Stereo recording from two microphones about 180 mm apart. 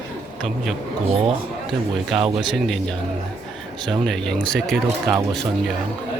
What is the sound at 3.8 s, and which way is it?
Speech, centre (ahead or behind).